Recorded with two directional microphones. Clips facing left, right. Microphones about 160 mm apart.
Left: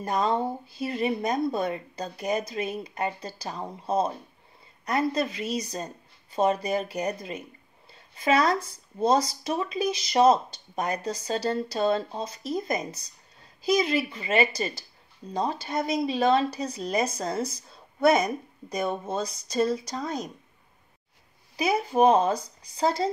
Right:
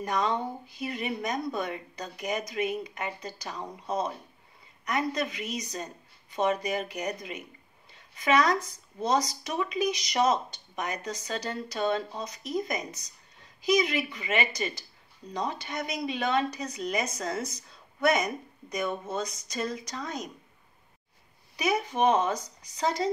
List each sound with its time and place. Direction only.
0.0 s speech: 30° left (ahead or behind)
21.5 s speech: 30° left (ahead or behind)